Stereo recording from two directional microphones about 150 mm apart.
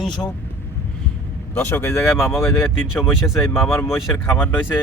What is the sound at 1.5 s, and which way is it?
Speech, 15° left (ahead or behind).